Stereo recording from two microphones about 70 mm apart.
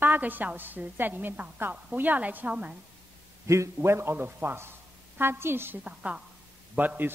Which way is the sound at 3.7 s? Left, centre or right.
Right.